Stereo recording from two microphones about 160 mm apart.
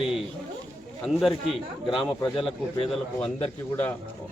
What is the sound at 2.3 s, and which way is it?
Speech, 35° left (ahead or behind).